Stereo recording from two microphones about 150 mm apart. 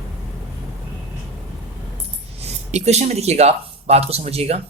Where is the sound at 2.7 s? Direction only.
50° right (ahead or behind).